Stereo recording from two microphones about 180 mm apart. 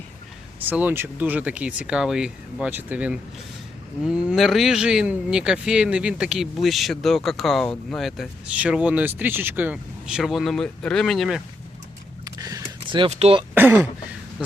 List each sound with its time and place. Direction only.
0.7 s speech: 10° right (ahead or behind)
12.2 s power windows: 20° right (ahead or behind)
13.5 s speech: 10° right (ahead or behind)